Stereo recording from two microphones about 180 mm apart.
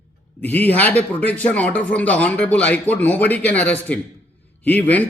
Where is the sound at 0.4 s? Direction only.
10° left (ahead or behind).